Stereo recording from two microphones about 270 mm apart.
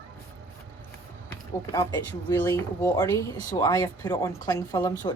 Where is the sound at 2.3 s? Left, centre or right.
Centre.